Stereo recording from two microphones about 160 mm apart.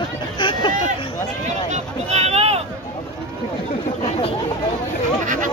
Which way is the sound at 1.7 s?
40° right (ahead or behind).